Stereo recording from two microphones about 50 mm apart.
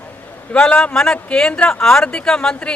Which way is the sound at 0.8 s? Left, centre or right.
Centre.